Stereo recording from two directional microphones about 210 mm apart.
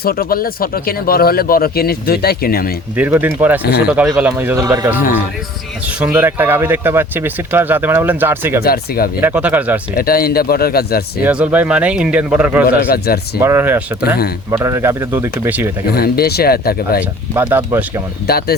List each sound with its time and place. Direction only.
0.0 s speech: 45° left (ahead or behind)
2.9 s speech: 5° right (ahead or behind)
3.6 s speech: 50° left (ahead or behind)
3.8 s speech: 5° right (ahead or behind)
8.6 s speech: 45° left (ahead or behind)
9.2 s speech: 5° right (ahead or behind)
10.0 s speech: 45° left (ahead or behind)
11.2 s speech: 5° right (ahead or behind)
12.6 s speech: 45° left (ahead or behind)
13.4 s speech: 10° right (ahead or behind)
16.0 s speech: 45° left (ahead or behind)
17.0 s speech: 10° right (ahead or behind)
18.3 s speech: 45° left (ahead or behind)